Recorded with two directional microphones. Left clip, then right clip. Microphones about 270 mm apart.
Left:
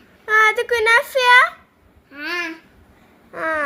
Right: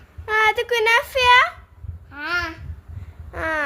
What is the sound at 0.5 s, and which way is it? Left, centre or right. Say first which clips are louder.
A child's voice: left 2 dB; centre.